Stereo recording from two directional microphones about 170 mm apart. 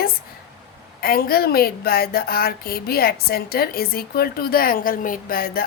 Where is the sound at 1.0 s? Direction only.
60° left (ahead or behind).